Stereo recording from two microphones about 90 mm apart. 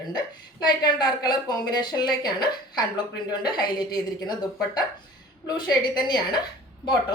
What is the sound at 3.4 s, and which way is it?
A woman's voice, 50° left (ahead or behind).